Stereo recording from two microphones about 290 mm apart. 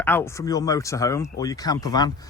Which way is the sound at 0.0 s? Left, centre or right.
Centre.